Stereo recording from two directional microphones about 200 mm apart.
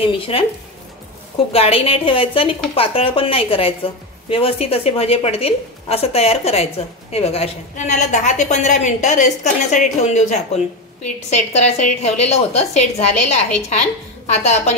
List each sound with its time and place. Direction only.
0.0 s a woman's voice: 25° left (ahead or behind)
1.5 s a woman's voice: 30° left (ahead or behind)